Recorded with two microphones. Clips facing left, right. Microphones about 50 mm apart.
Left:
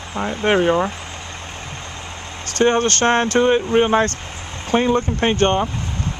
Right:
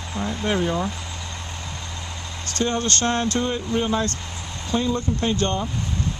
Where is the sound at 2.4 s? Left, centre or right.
Left.